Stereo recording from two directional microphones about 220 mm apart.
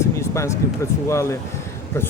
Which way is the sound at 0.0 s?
15° left (ahead or behind).